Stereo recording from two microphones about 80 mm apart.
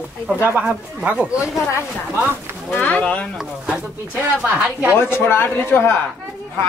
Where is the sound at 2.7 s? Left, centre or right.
Centre.